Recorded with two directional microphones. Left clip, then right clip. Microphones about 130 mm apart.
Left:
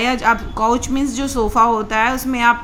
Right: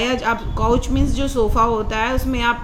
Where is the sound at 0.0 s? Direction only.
40° left (ahead or behind).